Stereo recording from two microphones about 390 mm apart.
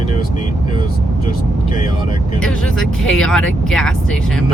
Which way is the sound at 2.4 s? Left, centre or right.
Centre.